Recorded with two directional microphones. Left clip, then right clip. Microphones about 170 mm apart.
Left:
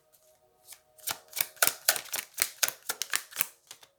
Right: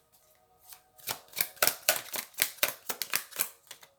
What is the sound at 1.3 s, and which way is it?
Typewriter, 15° left (ahead or behind).